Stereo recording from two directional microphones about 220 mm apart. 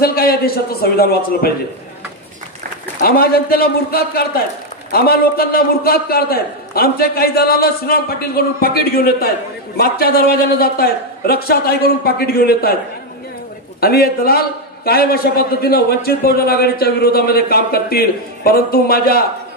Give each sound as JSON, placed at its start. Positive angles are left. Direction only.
{"t": 0.0, "sound": "a man's voice", "side_deg": 45}
{"t": 3.0, "sound": "a man's voice", "side_deg": 45}
{"t": 13.7, "sound": "a man's voice", "side_deg": 45}